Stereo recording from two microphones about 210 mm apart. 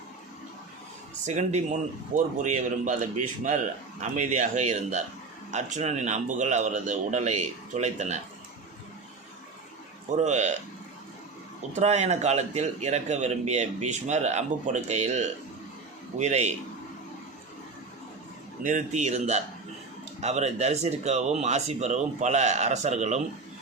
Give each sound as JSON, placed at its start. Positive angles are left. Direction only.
{"t": 1.4, "sound": "a man's voice", "side_deg": -35}
{"t": 10.2, "sound": "a man's voice", "side_deg": -35}
{"t": 11.7, "sound": "a man's voice", "side_deg": -30}
{"t": 18.6, "sound": "a man's voice", "side_deg": -35}